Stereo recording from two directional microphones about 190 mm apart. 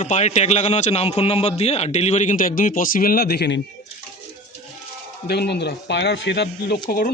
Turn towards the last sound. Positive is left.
turn(degrees=50)  # may be behind; listen again after turning